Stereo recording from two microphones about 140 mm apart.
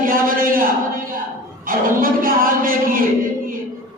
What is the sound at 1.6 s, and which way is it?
Music, 90° right.